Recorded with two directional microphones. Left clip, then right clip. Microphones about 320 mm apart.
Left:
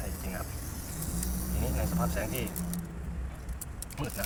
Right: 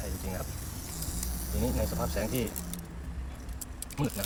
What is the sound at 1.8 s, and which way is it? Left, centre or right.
Speech, right.